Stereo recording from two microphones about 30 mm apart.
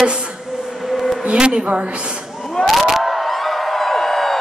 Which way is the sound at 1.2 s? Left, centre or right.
Right.